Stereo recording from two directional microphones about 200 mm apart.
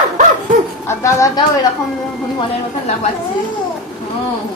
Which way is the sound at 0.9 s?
15° left (ahead or behind).